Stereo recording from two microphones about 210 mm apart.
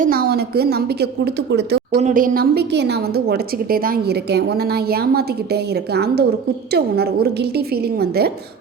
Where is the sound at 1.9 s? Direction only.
40° right (ahead or behind).